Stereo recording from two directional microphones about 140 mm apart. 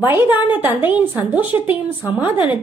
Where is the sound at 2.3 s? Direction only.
35° left (ahead or behind).